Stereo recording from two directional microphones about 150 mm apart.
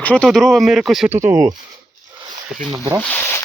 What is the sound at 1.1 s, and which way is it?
Speech, 15° right (ahead or behind).